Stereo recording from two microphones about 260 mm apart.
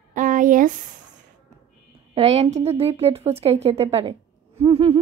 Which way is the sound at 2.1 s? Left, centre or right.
Right.